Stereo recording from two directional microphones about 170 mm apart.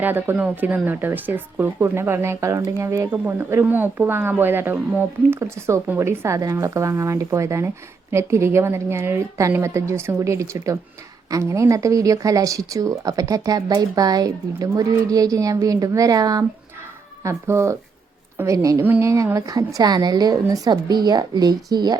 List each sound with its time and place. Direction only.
0.0 s speech: 10° right (ahead or behind)